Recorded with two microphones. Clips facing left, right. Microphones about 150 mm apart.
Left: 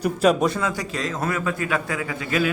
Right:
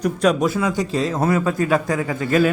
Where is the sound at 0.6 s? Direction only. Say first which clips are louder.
Right 6 dB; 20° right (ahead or behind); by 2.5 s 45° right (ahead or behind).